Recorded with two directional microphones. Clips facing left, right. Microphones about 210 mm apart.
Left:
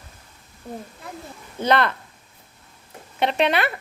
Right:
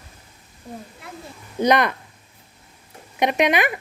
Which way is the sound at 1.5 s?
15° right (ahead or behind).